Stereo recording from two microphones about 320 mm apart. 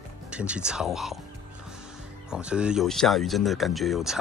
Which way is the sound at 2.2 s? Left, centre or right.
Centre.